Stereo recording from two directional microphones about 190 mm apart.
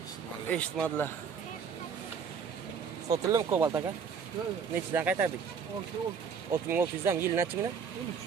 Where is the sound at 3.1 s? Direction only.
20° right (ahead or behind).